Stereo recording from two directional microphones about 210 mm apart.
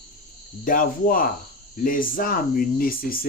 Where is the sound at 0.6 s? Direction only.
40° left (ahead or behind).